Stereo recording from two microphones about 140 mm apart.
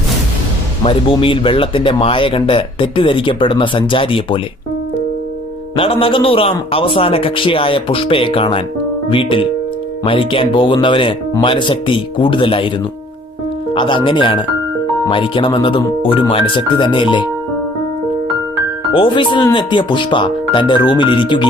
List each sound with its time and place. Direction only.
0.9 s speech: 40° left (ahead or behind)
5.7 s speech: 40° left (ahead or behind)
13.7 s speech: 35° left (ahead or behind)
18.9 s speech: 35° left (ahead or behind)